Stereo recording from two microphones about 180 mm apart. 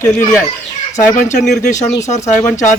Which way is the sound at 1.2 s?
45° left (ahead or behind).